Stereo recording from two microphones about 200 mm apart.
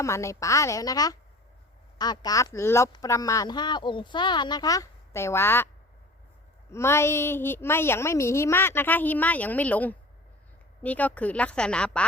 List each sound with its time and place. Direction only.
0.0 s a woman's voice: 15° left (ahead or behind)
6.7 s a woman's voice: 15° left (ahead or behind)